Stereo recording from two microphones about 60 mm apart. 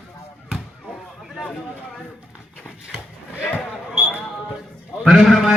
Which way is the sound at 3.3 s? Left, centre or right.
Left.